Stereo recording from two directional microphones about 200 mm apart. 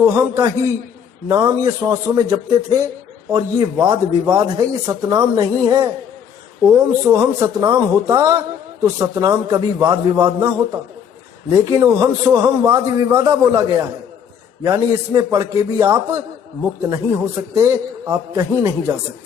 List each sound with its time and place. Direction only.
0.0 s a man's voice: 10° right (ahead or behind)
3.3 s a man's voice: 20° right (ahead or behind)